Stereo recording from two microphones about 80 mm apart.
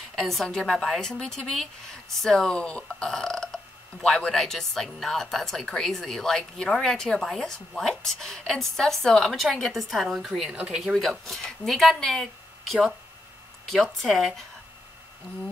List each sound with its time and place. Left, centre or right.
0.1 s a woman's voice: centre
10.5 s speech: centre
10.8 s a woman's voice: centre